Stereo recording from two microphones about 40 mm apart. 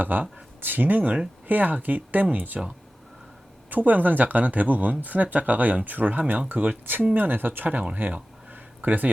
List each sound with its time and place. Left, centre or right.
0.0 s speech: right
3.7 s speech: right
8.1 s a sound: right